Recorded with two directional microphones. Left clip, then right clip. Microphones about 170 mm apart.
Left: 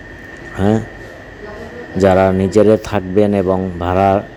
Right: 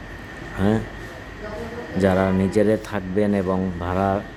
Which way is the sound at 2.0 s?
25° left (ahead or behind).